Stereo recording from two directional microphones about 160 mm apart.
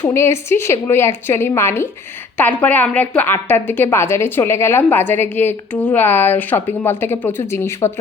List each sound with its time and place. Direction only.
0.0 s a woman's voice: 15° left (ahead or behind)